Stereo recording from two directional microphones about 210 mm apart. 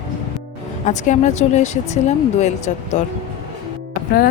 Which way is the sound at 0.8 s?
35° left (ahead or behind).